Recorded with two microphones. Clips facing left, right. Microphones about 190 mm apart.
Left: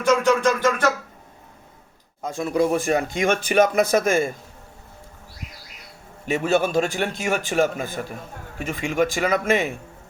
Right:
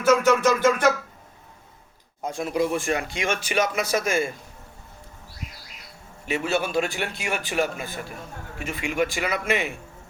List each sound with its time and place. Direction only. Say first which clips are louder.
0.3 s a sound: even; 10° right (ahead or behind)
2.3 s speech: left 4 dB; 40° left (ahead or behind)
6.2 s speech: left 5 dB; 45° left (ahead or behind)